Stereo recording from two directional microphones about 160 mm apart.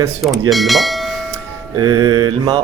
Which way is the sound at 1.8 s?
25° right (ahead or behind).